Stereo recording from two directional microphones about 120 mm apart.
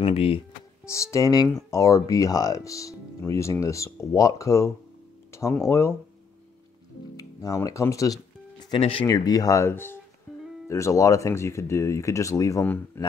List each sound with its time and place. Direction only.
0.0 s speech: 50° left (ahead or behind)
0.8 s speech: 25° left (ahead or behind)
5.3 s music: 25° left (ahead or behind)
5.7 s speech: 20° left (ahead or behind)
7.2 s music: 30° left (ahead or behind)
8.7 s speech: 50° left (ahead or behind)
9.0 s speech: 30° left (ahead or behind)
12.6 s speech: 15° left (ahead or behind)